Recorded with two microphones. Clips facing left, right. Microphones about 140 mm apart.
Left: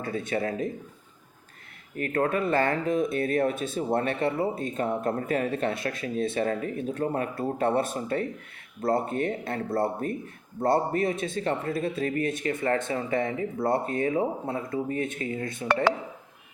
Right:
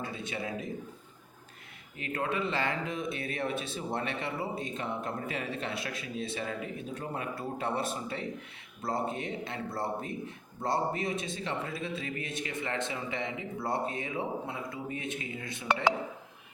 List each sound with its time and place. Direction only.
0.0 s a man's voice: 50° left (ahead or behind)
2.0 s a man's voice: 50° left (ahead or behind)